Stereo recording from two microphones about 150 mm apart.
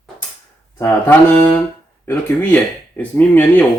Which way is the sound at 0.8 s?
10° left (ahead or behind).